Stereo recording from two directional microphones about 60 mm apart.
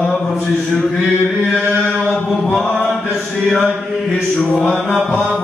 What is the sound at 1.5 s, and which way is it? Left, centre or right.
Chant, centre.